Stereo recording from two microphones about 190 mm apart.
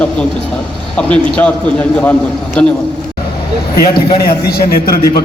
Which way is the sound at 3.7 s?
55° left (ahead or behind).